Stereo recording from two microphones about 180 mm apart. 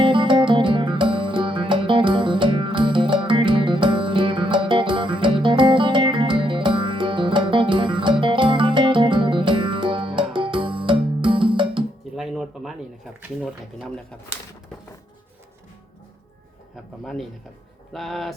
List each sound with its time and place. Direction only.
0.0 s music: 25° right (ahead or behind)
12.1 s music: centre (ahead or behind)
13.4 s speech: centre (ahead or behind)
17.0 s speech: 5° left (ahead or behind)